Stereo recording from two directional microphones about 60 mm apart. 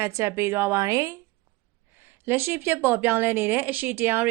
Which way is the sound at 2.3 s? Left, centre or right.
Right.